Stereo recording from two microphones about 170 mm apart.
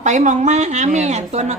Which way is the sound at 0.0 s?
45° right (ahead or behind).